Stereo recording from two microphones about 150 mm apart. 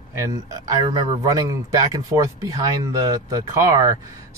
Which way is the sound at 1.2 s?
25° right (ahead or behind).